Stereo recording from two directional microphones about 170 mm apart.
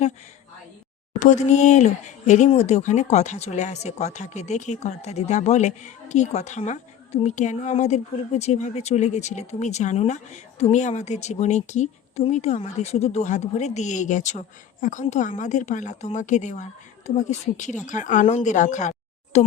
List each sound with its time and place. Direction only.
1.2 s speech: 45° left (ahead or behind)